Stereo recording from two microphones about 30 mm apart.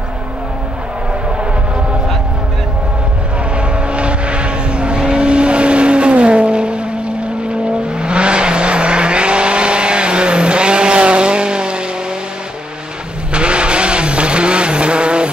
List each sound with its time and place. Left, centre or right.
3.5 s vehicle: right
13.3 s vehicle: right